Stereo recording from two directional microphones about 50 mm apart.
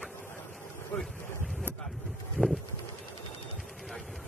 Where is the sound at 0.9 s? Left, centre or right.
Left.